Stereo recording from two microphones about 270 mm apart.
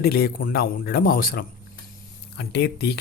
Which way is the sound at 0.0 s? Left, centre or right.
Left.